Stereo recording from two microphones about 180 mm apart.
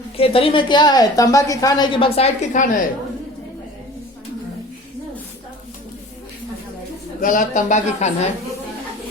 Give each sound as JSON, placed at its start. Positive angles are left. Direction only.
{"t": 0.2, "sound": "a woman's voice", "side_deg": 30}
{"t": 7.2, "sound": "a woman's voice", "side_deg": 45}